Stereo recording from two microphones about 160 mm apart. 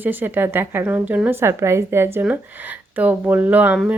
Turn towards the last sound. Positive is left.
turn(degrees=-10)  # may be behind; listen again after turning